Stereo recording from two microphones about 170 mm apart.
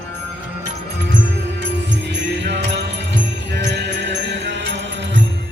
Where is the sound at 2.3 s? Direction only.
90° right.